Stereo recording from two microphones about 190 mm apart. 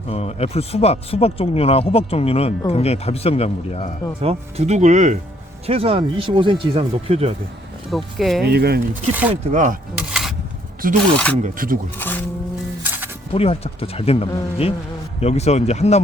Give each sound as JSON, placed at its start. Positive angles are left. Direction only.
{"t": 0.1, "sound": "speech", "side_deg": 35}
{"t": 4.2, "sound": "speech", "side_deg": -30}
{"t": 7.9, "sound": "speech", "side_deg": 0}
{"t": 8.4, "sound": "speech", "side_deg": -55}
{"t": 9.3, "sound": "speech", "side_deg": -40}
{"t": 10.1, "sound": "a sound", "side_deg": 0}
{"t": 10.8, "sound": "speech", "side_deg": -45}
{"t": 11.9, "sound": "music", "side_deg": 10}
{"t": 12.8, "sound": "music", "side_deg": -10}
{"t": 13.3, "sound": "speech", "side_deg": 30}